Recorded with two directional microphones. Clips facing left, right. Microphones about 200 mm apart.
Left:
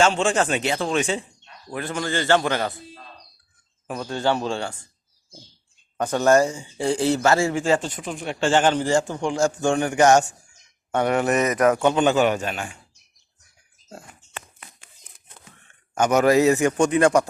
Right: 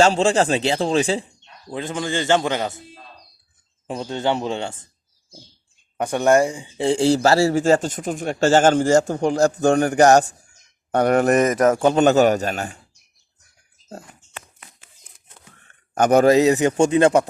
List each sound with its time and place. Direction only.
0.0 s speech: 35° right (ahead or behind)
1.7 s a man's voice: 20° right (ahead or behind)
6.0 s speech: 15° right (ahead or behind); by 12.7 s 40° right (ahead or behind)
16.1 s a man's voice: 25° right (ahead or behind)